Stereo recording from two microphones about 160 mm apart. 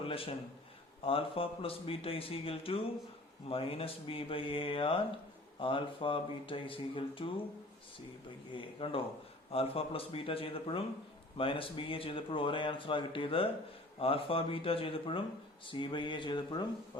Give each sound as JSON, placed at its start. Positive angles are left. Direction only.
{"t": 0.0, "sound": "a man's voice", "side_deg": 35}
{"t": 8.5, "sound": "speech", "side_deg": 35}
{"t": 15.6, "sound": "a sound", "side_deg": 30}